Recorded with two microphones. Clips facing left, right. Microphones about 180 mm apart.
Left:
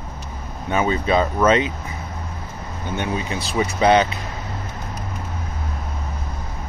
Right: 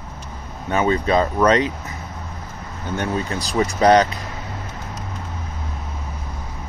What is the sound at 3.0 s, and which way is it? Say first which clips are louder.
Speech: right 2 dB; 15° left (ahead or behind).